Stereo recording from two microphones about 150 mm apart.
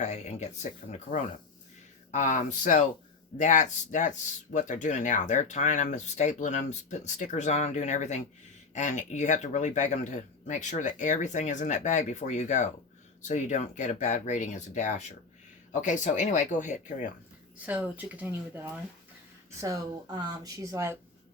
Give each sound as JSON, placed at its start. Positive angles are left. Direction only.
{"t": 0.0, "sound": "speech", "side_deg": 50}
{"t": 17.7, "sound": "speech", "side_deg": -10}
{"t": 19.6, "sound": "speech", "side_deg": -25}